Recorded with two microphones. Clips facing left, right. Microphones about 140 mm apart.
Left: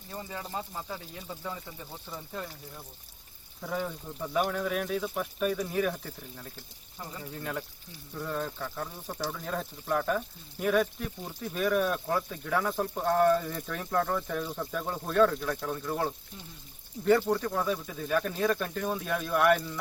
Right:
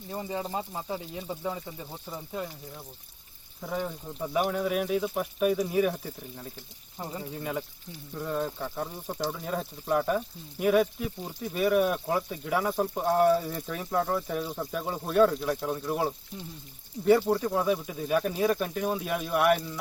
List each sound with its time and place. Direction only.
0.1 s speech: 20° right (ahead or behind)
7.0 s speech: 25° right (ahead or behind)
7.3 s speech: 5° right (ahead or behind)